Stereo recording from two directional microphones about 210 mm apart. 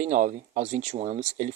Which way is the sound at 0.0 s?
35° right (ahead or behind).